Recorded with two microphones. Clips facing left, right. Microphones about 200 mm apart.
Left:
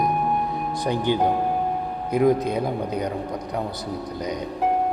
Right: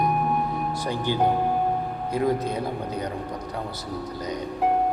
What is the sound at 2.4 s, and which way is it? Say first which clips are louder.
Speech: left 3 dB; 15° left (ahead or behind).